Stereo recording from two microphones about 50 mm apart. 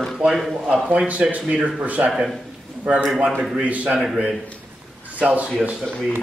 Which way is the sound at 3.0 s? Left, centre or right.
Centre.